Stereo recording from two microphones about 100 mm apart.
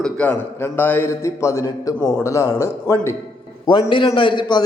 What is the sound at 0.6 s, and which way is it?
A man's voice, 20° left (ahead or behind).